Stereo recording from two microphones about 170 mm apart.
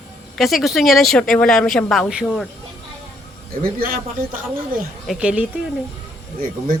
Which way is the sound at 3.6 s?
55° right (ahead or behind).